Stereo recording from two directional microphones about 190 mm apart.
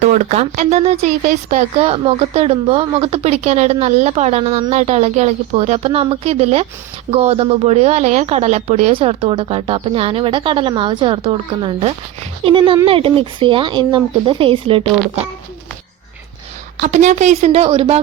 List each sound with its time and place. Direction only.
0.0 s speech: 35° right (ahead or behind)
16.8 s speech: 40° right (ahead or behind)